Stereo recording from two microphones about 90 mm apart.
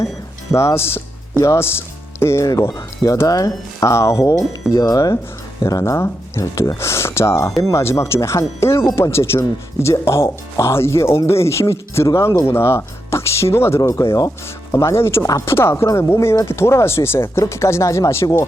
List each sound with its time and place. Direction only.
0.5 s speech: 30° left (ahead or behind)
2.6 s speech: 45° left (ahead or behind)